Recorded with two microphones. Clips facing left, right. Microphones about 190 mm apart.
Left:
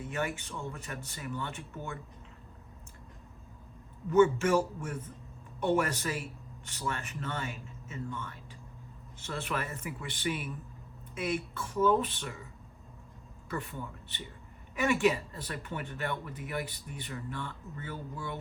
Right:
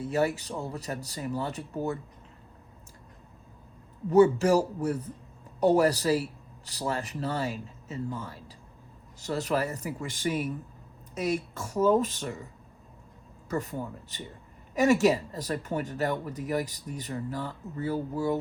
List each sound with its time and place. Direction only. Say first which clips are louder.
0.0 s speech: right 8 dB; 35° right (ahead or behind)
4.1 s speech: right 4 dB; 35° right (ahead or behind)
13.5 s speech: right 6 dB; 40° right (ahead or behind)